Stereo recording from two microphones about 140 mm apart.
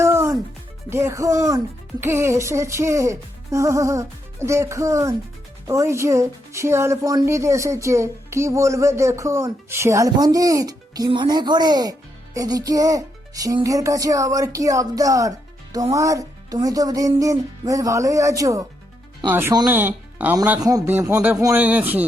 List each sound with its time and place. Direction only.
0.0 s music: 20° right (ahead or behind)
0.9 s a woman's voice: 20° right (ahead or behind)
20.6 s a woman's voice: 25° right (ahead or behind)